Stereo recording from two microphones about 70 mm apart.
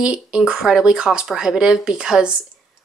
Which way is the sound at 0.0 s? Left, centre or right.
Centre.